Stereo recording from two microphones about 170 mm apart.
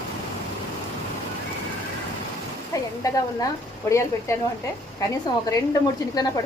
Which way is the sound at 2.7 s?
20° left (ahead or behind).